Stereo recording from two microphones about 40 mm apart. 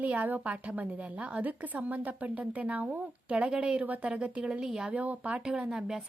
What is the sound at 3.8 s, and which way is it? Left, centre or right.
Speech, right.